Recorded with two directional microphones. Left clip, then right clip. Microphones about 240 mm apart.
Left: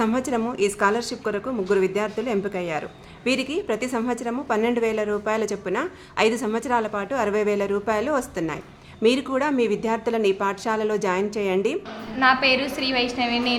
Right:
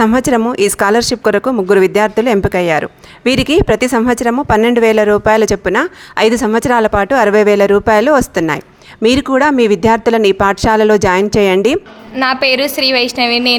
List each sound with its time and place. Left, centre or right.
0.0 s speech: right